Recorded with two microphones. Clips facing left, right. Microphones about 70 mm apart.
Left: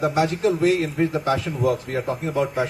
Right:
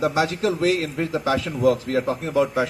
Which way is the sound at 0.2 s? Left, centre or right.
Right.